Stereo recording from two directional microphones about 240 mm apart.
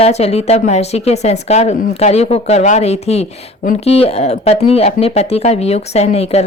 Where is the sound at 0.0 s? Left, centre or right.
Left.